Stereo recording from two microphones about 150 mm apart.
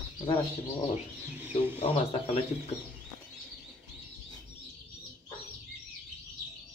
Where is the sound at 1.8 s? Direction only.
40° left (ahead or behind).